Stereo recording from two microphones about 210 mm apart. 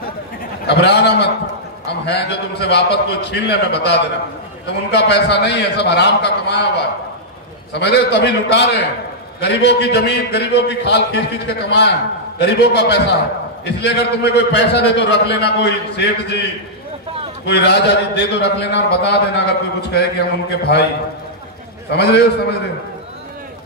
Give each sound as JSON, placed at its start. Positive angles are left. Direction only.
{"t": 0.7, "sound": "a man's voice", "side_deg": 50}
{"t": 17.5, "sound": "a man's voice", "side_deg": 55}
{"t": 21.9, "sound": "a man's voice", "side_deg": 50}